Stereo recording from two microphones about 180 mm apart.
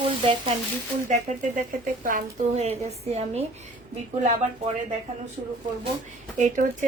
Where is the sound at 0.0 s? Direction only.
30° right (ahead or behind).